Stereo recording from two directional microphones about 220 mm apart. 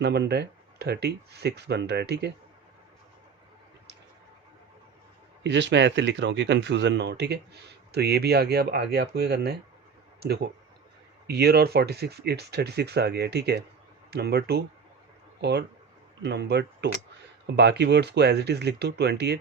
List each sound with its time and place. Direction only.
0.0 s speech: 50° right (ahead or behind)
5.4 s speech: 55° right (ahead or behind)